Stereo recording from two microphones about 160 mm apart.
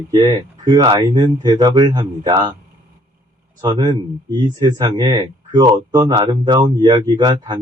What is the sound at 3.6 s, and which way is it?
Speech, 25° right (ahead or behind).